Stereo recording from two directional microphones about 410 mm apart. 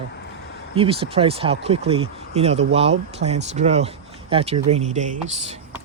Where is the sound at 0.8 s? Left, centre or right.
Centre.